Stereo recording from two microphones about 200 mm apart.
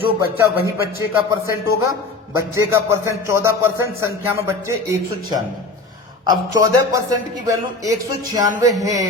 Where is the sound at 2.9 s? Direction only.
15° right (ahead or behind).